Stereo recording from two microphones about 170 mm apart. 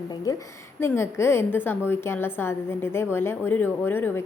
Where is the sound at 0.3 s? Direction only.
20° left (ahead or behind).